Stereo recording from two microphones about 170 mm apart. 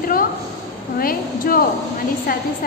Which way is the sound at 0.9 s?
60° left (ahead or behind).